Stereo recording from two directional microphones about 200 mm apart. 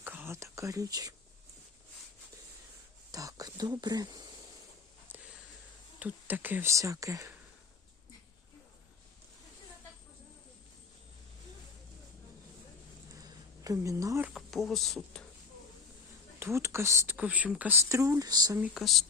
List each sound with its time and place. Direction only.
0.0 s speech: 10° right (ahead or behind)
3.1 s speech: 15° right (ahead or behind)
5.0 s a sound: 5° right (ahead or behind)
6.0 s speech: 10° right (ahead or behind)
13.1 s speech: 15° right (ahead or behind); by 15.2 s centre (ahead or behind)
16.4 s speech: 15° right (ahead or behind)
18.6 s speech: centre (ahead or behind)